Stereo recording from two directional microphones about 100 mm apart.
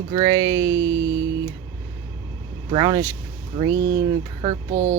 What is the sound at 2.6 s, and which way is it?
Speech, 50° right (ahead or behind).